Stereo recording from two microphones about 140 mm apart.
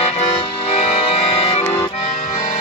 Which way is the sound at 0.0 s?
45° left (ahead or behind).